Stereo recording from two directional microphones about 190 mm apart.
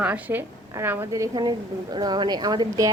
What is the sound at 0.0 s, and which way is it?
A woman's voice, 10° right (ahead or behind).